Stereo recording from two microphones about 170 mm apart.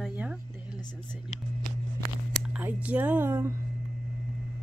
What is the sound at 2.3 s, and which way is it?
Speech, 10° right (ahead or behind).